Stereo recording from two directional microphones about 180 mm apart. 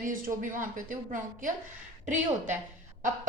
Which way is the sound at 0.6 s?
50° right (ahead or behind).